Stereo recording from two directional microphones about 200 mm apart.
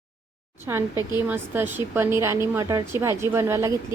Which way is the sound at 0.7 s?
10° right (ahead or behind).